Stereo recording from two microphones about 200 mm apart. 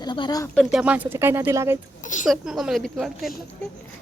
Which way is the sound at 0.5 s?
Centre (ahead or behind).